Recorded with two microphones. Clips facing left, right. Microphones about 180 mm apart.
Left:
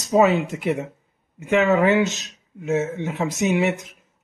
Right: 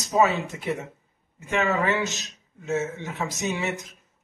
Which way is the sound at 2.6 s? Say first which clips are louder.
Left 5 dB; 60° left (ahead or behind).